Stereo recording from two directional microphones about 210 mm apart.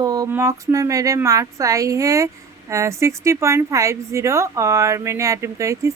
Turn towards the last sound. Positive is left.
turn(degrees=-15)  # may be behind; listen again after turning